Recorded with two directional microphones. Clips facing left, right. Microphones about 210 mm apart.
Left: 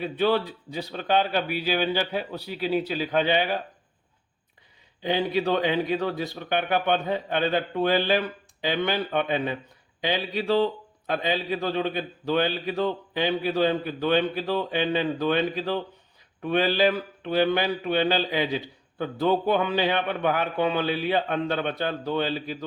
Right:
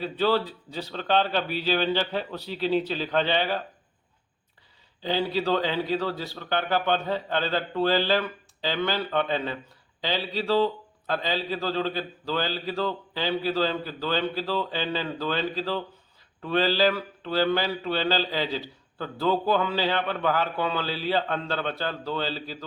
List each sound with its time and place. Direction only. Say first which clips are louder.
0.0 s mantra: left 1 dB; 15° left (ahead or behind)
5.0 s mantra: left 1 dB; 15° left (ahead or behind)